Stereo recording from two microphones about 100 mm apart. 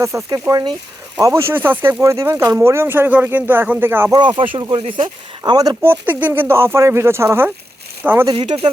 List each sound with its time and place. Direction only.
0.0 s speech: 30° right (ahead or behind)
4.1 s speech: 50° right (ahead or behind)
4.7 s speech: 65° right (ahead or behind)
5.4 s speech: 40° right (ahead or behind)
5.8 s speech: 20° right (ahead or behind)
8.4 s speech: 60° right (ahead or behind)